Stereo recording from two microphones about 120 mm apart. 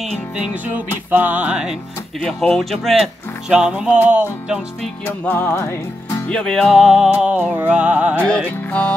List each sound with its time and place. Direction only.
0.0 s music: 10° right (ahead or behind)
2.2 s speech: 5° left (ahead or behind); by 4.6 s 10° right (ahead or behind)
5.2 s music: 20° left (ahead or behind)
6.2 s speech: 5° left (ahead or behind)
7.1 s music: 10° right (ahead or behind)
8.6 s music: 15° left (ahead or behind)